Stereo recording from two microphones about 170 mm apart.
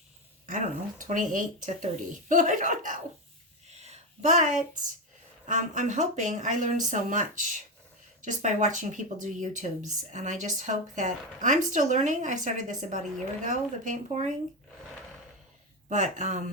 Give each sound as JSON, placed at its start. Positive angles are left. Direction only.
{"t": 0.4, "sound": "speech", "side_deg": -50}
{"t": 3.7, "sound": "a sound", "side_deg": -40}
{"t": 5.5, "sound": "speech", "side_deg": -45}
{"t": 15.9, "sound": "speech", "side_deg": -45}